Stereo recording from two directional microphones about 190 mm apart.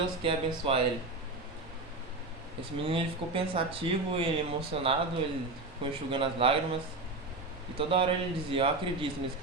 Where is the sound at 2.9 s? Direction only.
30° right (ahead or behind).